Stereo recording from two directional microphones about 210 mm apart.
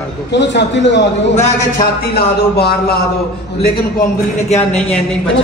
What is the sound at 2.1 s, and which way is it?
Speech, 50° left (ahead or behind).